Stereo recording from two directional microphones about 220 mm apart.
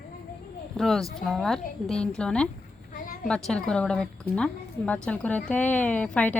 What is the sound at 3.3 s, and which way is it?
A woman's voice, 5° left (ahead or behind).